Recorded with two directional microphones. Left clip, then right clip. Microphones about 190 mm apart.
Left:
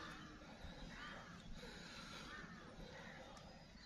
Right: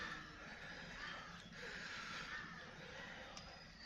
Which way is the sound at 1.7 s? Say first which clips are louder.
Right 7 dB; centre (ahead or behind).